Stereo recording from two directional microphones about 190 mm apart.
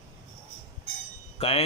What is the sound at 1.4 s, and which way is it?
Speech, 30° left (ahead or behind).